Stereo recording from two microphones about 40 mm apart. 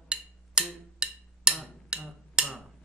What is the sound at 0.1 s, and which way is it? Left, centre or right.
Percussion, right.